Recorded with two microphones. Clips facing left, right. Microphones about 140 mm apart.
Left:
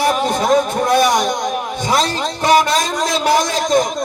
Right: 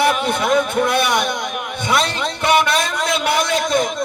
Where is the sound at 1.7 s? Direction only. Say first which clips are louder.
Even; 60° right (ahead or behind).